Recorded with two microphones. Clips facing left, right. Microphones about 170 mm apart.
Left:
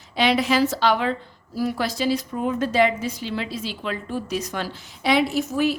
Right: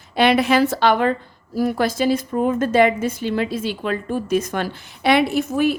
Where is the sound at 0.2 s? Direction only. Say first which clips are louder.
Right 4 dB; 55° right (ahead or behind).